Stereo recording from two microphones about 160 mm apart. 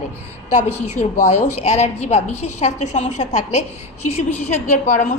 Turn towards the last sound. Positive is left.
turn(degrees=50)  # may be behind; listen again after turning